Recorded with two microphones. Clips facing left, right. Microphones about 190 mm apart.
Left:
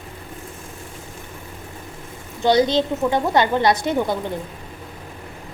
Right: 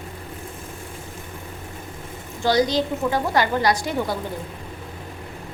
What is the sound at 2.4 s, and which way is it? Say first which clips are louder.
A woman's voice: left 3 dB; 25° left (ahead or behind).